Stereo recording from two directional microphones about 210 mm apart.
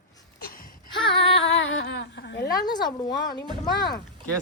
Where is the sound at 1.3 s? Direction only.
65° left (ahead or behind).